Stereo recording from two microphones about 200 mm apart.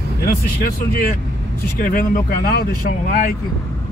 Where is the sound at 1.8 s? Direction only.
45° left (ahead or behind).